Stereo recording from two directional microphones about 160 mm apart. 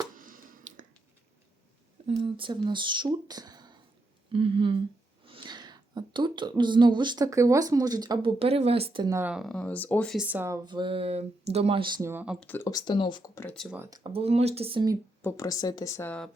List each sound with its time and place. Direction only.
0.1 s a sound: 60° right (ahead or behind)
2.1 s speech: 30° right (ahead or behind)
8.4 s speech: 40° right (ahead or behind)
9.1 s speech: 5° right (ahead or behind); by 10.2 s 10° left (ahead or behind)
10.2 s speech: 10° right (ahead or behind)
10.7 s speech: 30° right (ahead or behind)
12.0 s speech: 10° right (ahead or behind)
12.4 s speech: 10° left (ahead or behind)
12.6 s speech: 25° left (ahead or behind)
13.3 s speech: 15° left (ahead or behind)
13.6 s speech: 5° right (ahead or behind)
14.1 s speech: 40° right (ahead or behind)
15.2 s speech: 20° left (ahead or behind)